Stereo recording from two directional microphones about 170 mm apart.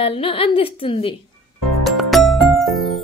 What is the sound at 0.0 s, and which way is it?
A woman's voice, 35° left (ahead or behind).